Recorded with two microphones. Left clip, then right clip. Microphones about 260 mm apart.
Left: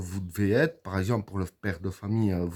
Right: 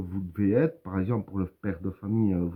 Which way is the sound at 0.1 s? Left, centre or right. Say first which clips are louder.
Even; left.